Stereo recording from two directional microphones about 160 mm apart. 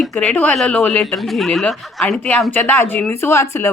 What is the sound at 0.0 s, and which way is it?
A woman's voice, 5° left (ahead or behind).